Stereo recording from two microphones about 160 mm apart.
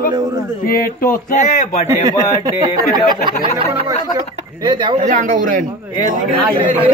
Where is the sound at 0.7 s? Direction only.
65° left (ahead or behind).